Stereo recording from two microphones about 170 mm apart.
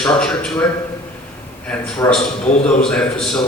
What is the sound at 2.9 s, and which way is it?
Speech, 5° left (ahead or behind).